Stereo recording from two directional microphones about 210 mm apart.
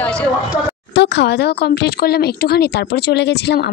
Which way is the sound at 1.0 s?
55° left (ahead or behind).